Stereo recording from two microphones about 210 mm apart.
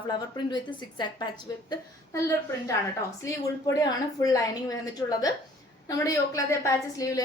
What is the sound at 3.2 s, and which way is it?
A woman's voice, 15° left (ahead or behind).